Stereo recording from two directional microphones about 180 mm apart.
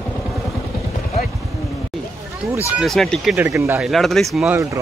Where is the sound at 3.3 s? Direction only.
15° right (ahead or behind).